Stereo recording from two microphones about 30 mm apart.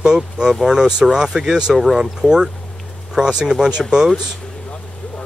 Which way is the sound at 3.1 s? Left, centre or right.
Right.